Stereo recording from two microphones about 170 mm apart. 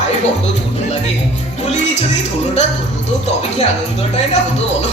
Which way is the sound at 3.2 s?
40° left (ahead or behind).